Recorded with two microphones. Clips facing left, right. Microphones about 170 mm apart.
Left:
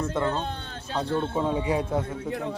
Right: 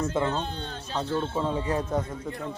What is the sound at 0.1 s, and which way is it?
Speech, 5° right (ahead or behind).